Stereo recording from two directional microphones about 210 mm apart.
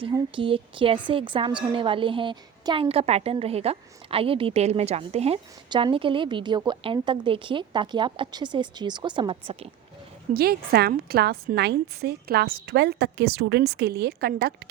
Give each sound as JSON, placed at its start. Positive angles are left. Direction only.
{"t": 0.0, "sound": "a woman's voice", "side_deg": -25}
{"t": 10.3, "sound": "a woman's voice", "side_deg": -45}